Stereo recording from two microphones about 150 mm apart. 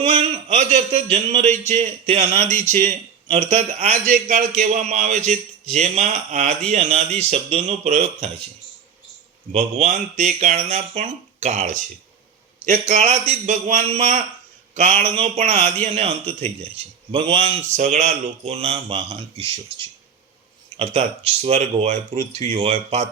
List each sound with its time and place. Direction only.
0.0 s a man's voice: 40° right (ahead or behind)
9.5 s a man's voice: 45° right (ahead or behind)
17.7 s a man's voice: 55° right (ahead or behind)